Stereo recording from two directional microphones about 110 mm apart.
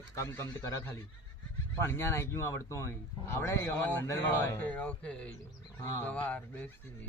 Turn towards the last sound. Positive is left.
turn(degrees=10)  # may be behind; listen again after turning